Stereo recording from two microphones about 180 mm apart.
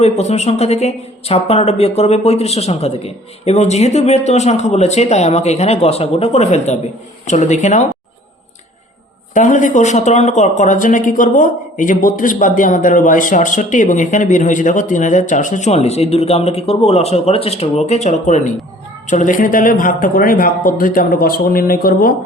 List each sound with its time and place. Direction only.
0.0 s speech: 40° left (ahead or behind)
9.3 s speech: 45° left (ahead or behind)